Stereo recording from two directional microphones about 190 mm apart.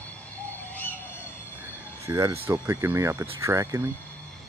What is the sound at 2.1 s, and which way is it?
Speech, 15° right (ahead or behind).